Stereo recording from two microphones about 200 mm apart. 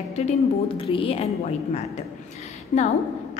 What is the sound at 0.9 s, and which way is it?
Speech, 30° left (ahead or behind).